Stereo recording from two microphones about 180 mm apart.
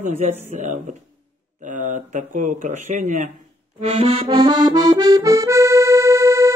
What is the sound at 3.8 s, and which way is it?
Accordion, 35° right (ahead or behind).